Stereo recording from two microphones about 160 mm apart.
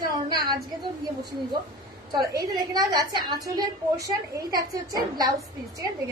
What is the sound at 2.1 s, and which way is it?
A woman's voice, 25° right (ahead or behind).